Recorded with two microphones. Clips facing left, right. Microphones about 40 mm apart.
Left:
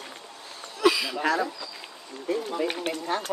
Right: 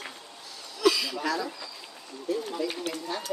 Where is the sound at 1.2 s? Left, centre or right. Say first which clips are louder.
Left 4 dB; left.